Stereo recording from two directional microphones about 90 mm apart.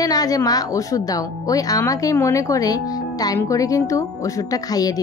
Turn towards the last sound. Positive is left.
turn(degrees=45)  # may be behind; listen again after turning